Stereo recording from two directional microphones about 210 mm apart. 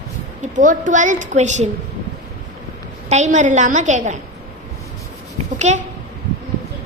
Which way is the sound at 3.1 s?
35° right (ahead or behind).